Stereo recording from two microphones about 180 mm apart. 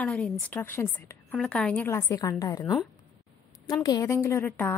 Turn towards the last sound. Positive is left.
turn(degrees=10)  # may be behind; listen again after turning